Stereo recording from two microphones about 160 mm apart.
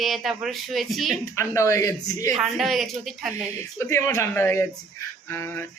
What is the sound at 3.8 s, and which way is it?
A man's voice, 15° left (ahead or behind).